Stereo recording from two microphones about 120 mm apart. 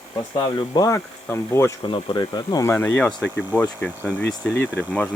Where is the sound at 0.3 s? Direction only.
35° left (ahead or behind).